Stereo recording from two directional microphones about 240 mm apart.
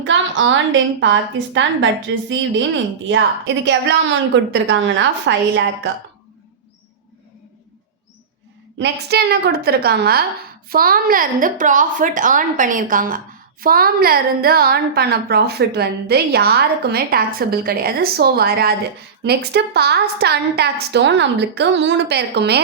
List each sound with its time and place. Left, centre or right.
0.0 s a woman's voice: right
8.8 s a woman's voice: right